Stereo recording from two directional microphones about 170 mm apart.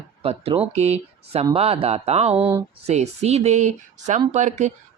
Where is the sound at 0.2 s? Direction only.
35° right (ahead or behind).